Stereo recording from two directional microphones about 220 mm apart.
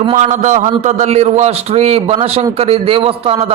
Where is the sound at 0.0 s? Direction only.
30° right (ahead or behind).